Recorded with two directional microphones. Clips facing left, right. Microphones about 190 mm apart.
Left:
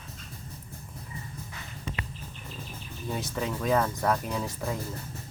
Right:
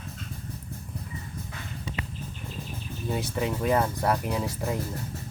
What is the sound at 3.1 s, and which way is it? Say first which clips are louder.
Speech: right 3 dB; 10° right (ahead or behind).